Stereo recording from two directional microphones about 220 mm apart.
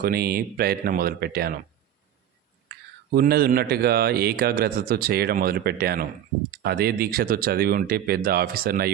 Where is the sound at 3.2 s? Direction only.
45° right (ahead or behind).